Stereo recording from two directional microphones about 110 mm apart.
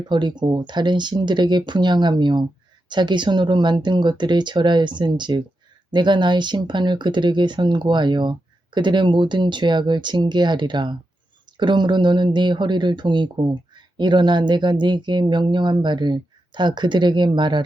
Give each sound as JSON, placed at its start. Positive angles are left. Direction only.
{"t": 0.1, "sound": "speech", "side_deg": -45}